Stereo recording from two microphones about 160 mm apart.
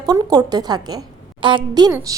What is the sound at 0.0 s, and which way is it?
A woman's voice, 25° right (ahead or behind).